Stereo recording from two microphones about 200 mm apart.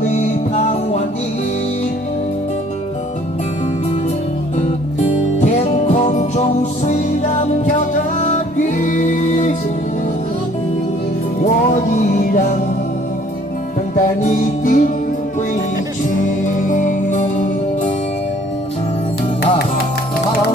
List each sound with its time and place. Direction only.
0.1 s music: 35° left (ahead or behind)
5.4 s music: 35° left (ahead or behind)
11.4 s music: 40° left (ahead or behind)
13.9 s music: 40° left (ahead or behind)
16.4 s music: 40° left (ahead or behind)